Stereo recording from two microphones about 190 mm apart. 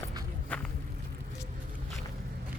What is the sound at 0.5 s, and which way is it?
Walk, 10° left (ahead or behind).